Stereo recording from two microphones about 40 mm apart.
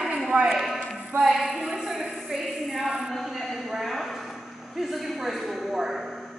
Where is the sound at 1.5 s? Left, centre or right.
Centre.